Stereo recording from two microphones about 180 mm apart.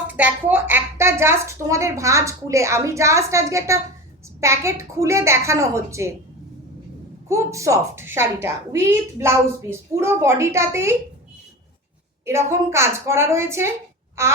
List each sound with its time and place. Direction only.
0.1 s a woman's voice: 10° right (ahead or behind)
7.3 s a woman's voice: 15° right (ahead or behind)
12.2 s a woman's voice: 15° right (ahead or behind)